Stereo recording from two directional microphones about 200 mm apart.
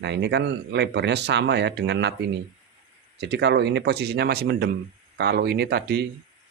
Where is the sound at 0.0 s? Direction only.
60° right (ahead or behind).